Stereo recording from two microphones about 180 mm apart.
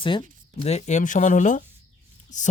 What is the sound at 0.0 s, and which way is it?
Speech, 30° left (ahead or behind).